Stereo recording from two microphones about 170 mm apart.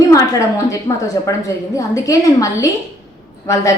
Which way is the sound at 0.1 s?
20° left (ahead or behind).